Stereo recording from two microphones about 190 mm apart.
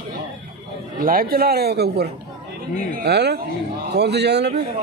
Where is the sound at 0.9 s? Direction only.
50° right (ahead or behind).